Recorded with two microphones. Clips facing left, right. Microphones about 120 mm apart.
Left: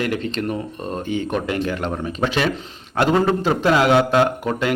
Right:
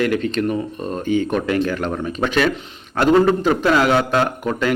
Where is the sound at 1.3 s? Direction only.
25° left (ahead or behind).